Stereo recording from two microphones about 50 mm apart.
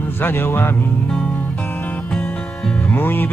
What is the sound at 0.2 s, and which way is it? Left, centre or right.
Music, left.